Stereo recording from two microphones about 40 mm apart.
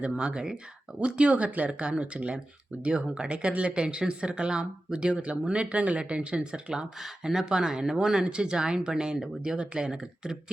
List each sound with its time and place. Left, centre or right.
0.2 s speech: right
1.8 s speech: right